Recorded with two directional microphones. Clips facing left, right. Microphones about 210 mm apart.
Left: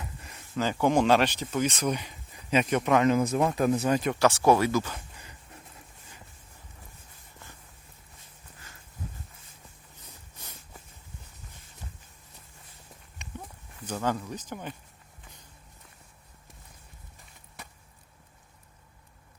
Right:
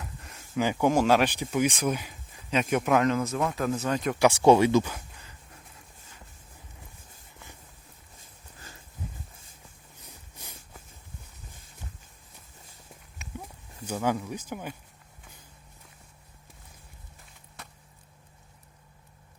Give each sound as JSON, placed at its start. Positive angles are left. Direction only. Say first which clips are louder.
{"t": 0.0, "sound": "a sound", "louder": "even", "side_deg": 0}
{"t": 0.5, "sound": "speech", "louder": "right 1 dB", "side_deg": -10}
{"t": 3.3, "sound": "speech", "louder": "left 3 dB", "side_deg": 20}
{"t": 4.1, "sound": "speech", "louder": "right 5 dB", "side_deg": -15}
{"t": 13.1, "sound": "horse", "louder": "right 1 dB", "side_deg": -10}
{"t": 13.8, "sound": "speech", "louder": "right 2 dB", "side_deg": -10}